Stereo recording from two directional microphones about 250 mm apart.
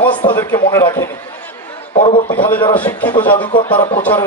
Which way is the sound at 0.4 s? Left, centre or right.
Centre.